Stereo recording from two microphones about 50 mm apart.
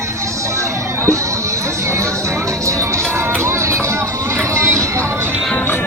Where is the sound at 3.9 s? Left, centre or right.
Right.